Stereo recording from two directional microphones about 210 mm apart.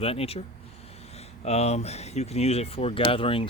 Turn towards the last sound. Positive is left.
turn(degrees=25)  # may be behind; listen again after turning